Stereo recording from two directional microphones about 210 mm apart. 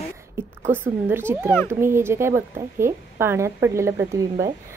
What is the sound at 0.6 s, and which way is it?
Speech, 10° right (ahead or behind).